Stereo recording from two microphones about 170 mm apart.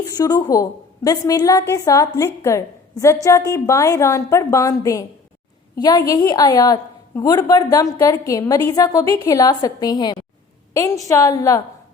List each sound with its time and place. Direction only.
0.1 s a woman's voice: 20° left (ahead or behind)